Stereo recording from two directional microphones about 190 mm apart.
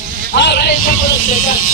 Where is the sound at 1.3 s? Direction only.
50° left (ahead or behind).